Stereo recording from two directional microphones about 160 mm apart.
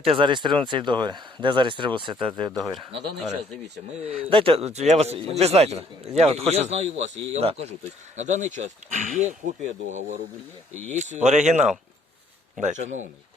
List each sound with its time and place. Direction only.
0.0 s speech: 35° right (ahead or behind)
2.6 s speech: centre (ahead or behind)
4.1 s a man's voice: 35° right (ahead or behind)